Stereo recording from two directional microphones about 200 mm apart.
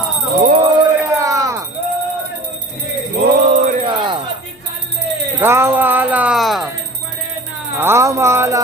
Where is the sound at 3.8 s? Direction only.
25° right (ahead or behind).